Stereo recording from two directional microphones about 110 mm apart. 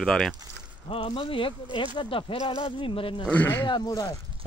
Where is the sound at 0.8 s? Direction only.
50° left (ahead or behind).